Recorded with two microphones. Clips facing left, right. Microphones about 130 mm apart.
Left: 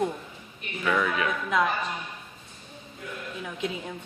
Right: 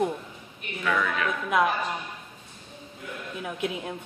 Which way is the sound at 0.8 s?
10° left (ahead or behind).